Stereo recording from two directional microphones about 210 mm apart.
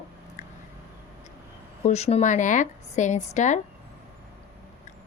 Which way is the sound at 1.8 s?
30° left (ahead or behind).